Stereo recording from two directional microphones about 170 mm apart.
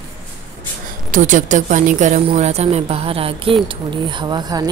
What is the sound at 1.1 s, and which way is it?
A woman's voice, 50° right (ahead or behind).